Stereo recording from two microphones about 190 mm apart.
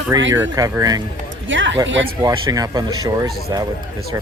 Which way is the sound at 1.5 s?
80° right.